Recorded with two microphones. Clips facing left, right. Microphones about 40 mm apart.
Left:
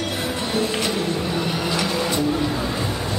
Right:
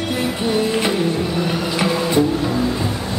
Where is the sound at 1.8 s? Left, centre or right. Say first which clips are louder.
Right 8 dB; centre.